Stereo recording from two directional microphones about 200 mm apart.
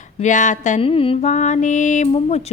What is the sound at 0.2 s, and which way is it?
Mantra, 40° left (ahead or behind).